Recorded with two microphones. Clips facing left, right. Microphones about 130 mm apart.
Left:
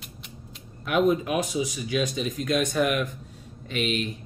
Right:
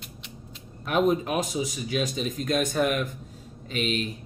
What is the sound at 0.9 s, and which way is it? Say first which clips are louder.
Speech: left 1 dB; 40° right (ahead or behind).